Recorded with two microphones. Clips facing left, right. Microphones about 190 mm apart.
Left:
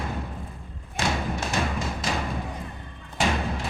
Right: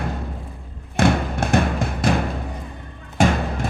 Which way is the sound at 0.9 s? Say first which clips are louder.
Right 8 dB; 55° right (ahead or behind).